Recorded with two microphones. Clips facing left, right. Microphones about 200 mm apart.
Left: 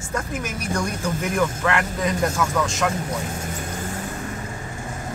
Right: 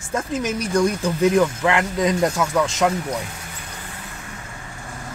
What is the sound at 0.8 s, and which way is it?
Speech, 20° right (ahead or behind).